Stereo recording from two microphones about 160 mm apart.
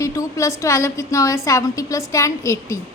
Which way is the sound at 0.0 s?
20° left (ahead or behind).